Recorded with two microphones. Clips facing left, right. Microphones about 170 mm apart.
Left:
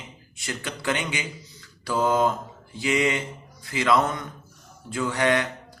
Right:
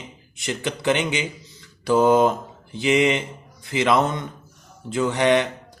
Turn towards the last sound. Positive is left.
turn(degrees=-20)  # may be behind; listen again after turning